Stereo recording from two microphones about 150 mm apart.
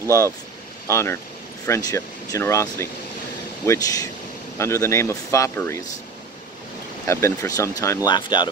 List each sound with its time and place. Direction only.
0.8 s speech: 20° left (ahead or behind)
7.1 s speech: 20° left (ahead or behind)